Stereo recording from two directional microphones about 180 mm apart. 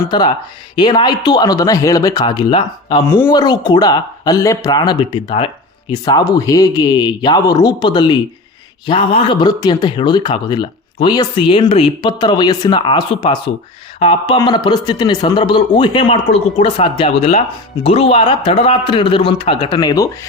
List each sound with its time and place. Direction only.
0.0 s a man's voice: 25° left (ahead or behind)